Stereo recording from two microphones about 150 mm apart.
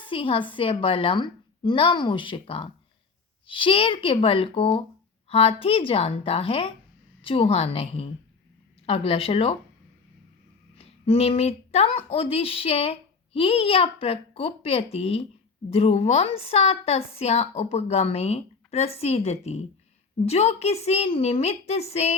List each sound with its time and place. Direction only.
0.1 s a woman's voice: 35° left (ahead or behind)
10.8 s a woman's voice: 40° left (ahead or behind)